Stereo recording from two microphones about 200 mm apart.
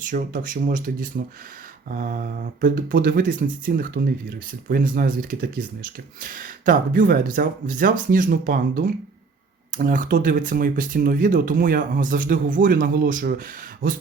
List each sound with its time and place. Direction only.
0.1 s speech: 40° right (ahead or behind)